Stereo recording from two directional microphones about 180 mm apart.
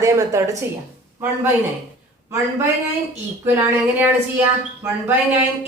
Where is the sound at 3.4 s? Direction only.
10° right (ahead or behind).